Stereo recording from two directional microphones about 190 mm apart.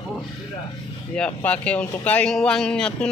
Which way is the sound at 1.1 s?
5° left (ahead or behind).